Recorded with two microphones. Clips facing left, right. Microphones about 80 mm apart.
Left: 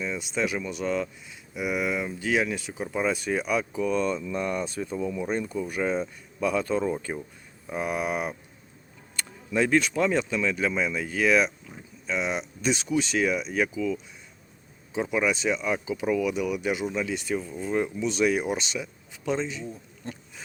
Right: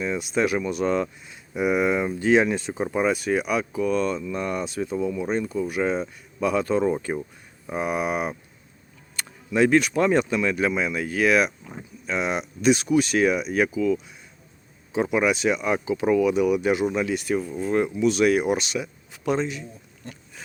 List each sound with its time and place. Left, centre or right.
0.0 s speech: centre
1.5 s speech: right
3.0 s speech: centre
9.5 s speech: centre
20.0 s a sound: left